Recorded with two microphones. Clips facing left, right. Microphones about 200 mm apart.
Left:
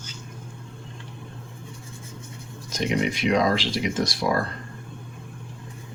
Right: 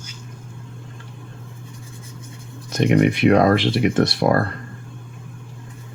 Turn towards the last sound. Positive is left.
turn(degrees=-60)  # may be behind; listen again after turning